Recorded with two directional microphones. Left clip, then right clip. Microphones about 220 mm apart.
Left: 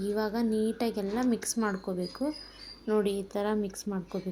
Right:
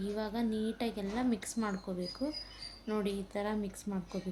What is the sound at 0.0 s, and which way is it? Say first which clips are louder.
A woman's voice: left 6 dB; 10° left (ahead or behind).